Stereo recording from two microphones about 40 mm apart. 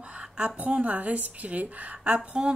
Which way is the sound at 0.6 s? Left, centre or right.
Right.